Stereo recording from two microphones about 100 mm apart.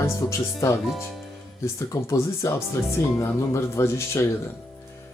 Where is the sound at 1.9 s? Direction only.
30° left (ahead or behind).